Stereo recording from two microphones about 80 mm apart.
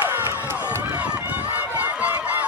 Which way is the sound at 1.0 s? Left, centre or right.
Centre.